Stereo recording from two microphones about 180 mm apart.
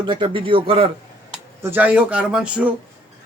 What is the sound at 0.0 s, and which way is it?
Speech, 25° right (ahead or behind).